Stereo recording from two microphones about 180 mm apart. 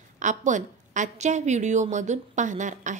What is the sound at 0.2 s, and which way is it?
A woman's voice, 45° right (ahead or behind).